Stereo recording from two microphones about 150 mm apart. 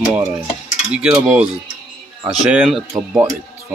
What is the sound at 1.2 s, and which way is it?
Speech, 5° right (ahead or behind).